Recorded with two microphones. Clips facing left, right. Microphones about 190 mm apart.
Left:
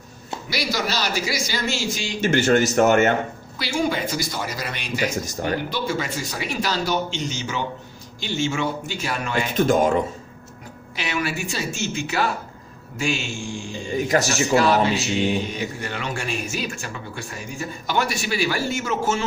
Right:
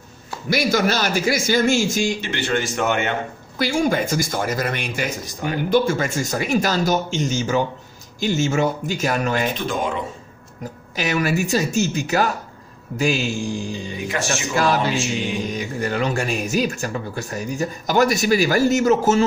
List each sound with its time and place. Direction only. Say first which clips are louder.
0.5 s speech: right 7 dB; 50° right (ahead or behind)
2.1 s a man's voice: left 5 dB; 45° left (ahead or behind)
3.5 s speech: right 4 dB; 50° right (ahead or behind)
5.1 s a man's voice: left 1 dB; 45° left (ahead or behind)
5.7 s speech: right 7 dB; 50° right (ahead or behind)
9.6 s a man's voice: left 6 dB; 45° left (ahead or behind)
11.0 s speech: right 6 dB; 40° right (ahead or behind)
13.9 s a man's voice: left 6 dB; 40° left (ahead or behind)
15.4 s speech: right 4 dB; 40° right (ahead or behind)